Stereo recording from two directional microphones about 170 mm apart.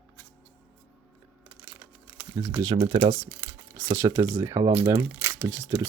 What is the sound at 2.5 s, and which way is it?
Speech, 25° right (ahead or behind).